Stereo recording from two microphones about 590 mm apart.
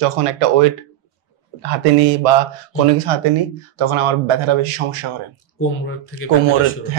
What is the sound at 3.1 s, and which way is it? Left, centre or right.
Speech, right.